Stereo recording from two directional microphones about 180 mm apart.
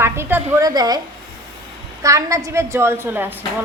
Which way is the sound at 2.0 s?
15° right (ahead or behind).